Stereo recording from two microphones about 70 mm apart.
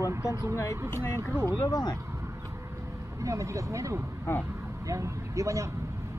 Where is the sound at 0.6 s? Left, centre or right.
Left.